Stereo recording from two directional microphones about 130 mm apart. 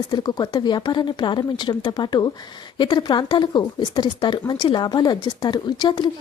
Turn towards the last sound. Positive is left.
turn(degrees=35)  # may be behind; listen again after turning